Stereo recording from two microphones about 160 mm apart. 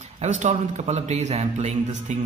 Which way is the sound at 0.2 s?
50° right (ahead or behind).